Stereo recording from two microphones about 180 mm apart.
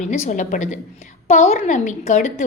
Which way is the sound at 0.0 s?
40° left (ahead or behind).